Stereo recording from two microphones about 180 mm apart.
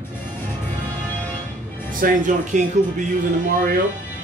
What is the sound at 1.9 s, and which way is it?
Speech, 45° right (ahead or behind).